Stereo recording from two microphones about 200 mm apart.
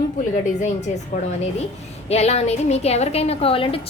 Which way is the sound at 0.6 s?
35° left (ahead or behind).